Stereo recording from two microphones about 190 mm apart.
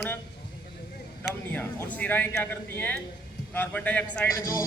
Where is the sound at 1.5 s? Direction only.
10° left (ahead or behind).